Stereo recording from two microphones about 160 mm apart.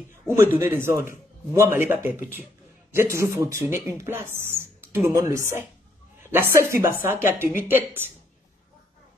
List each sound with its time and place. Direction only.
0.3 s a man's voice: 15° right (ahead or behind)
6.7 s a man's voice: 15° right (ahead or behind)